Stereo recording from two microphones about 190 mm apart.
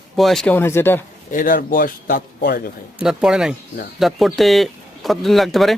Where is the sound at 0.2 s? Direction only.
Centre (ahead or behind).